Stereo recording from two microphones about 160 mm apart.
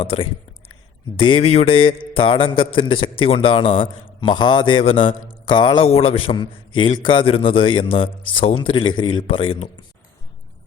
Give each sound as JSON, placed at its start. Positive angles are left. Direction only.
{"t": 0.0, "sound": "a man's voice", "side_deg": 35}